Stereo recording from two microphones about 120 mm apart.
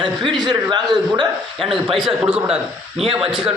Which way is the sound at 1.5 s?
Centre (ahead or behind).